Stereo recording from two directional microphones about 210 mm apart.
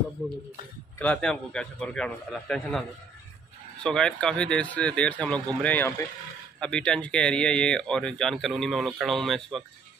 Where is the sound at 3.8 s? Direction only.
5° left (ahead or behind).